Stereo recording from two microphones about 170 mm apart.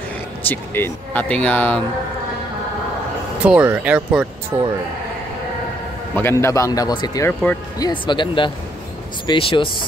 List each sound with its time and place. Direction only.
0.5 s speech: 10° left (ahead or behind)
3.4 s speech: 10° right (ahead or behind)
6.1 s a man's voice: 15° left (ahead or behind)
7.5 s speech: 10° left (ahead or behind)
7.8 s a man's voice: 25° left (ahead or behind)